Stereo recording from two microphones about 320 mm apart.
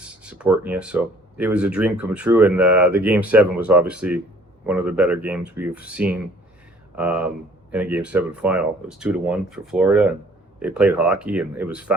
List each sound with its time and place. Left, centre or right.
0.0 s speech: centre